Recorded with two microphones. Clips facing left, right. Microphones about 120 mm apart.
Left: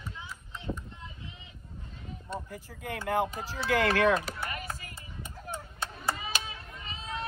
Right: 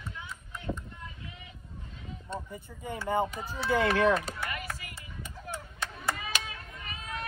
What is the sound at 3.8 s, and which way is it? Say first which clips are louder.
Speech: even; centre (ahead or behind).